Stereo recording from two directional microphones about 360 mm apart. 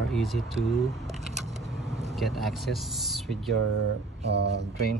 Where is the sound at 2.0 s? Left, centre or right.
Centre.